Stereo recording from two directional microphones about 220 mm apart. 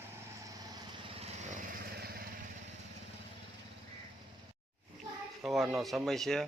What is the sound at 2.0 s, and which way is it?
Vehicle, 45° right (ahead or behind).